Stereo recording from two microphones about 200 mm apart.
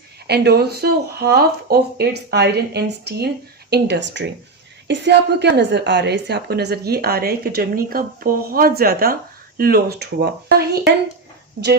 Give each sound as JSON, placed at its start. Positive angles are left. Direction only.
{"t": 0.3, "sound": "a woman's voice", "side_deg": -55}